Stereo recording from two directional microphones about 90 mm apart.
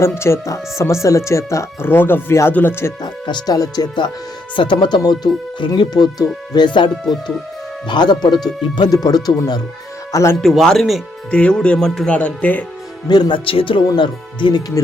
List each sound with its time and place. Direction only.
0.0 s speech: 30° left (ahead or behind)
3.0 s speech: 50° left (ahead or behind)
4.5 s speech: 65° left (ahead or behind); by 9.6 s 45° left (ahead or behind)
10.1 s speech: 35° left (ahead or behind)
10.4 s speech: 5° left (ahead or behind)
11.3 s speech: 10° left (ahead or behind)
13.1 s speech: 55° left (ahead or behind); by 13.8 s 75° left (ahead or behind)
13.8 s speech: 55° left (ahead or behind)